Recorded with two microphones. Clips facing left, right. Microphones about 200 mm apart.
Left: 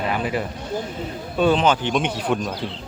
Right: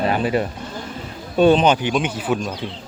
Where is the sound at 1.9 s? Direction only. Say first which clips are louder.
Right 1 dB; centre (ahead or behind).